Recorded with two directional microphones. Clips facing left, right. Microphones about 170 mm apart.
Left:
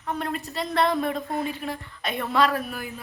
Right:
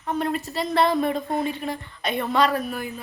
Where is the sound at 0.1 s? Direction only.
Centre (ahead or behind).